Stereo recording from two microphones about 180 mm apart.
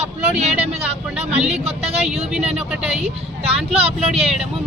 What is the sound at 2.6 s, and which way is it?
Speech, 5° right (ahead or behind).